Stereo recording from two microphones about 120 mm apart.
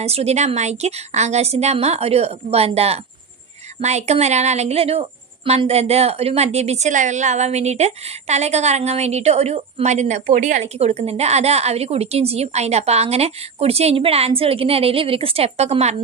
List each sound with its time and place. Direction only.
0.0 s a woman's voice: 60° right (ahead or behind)
3.8 s a woman's voice: 70° right (ahead or behind)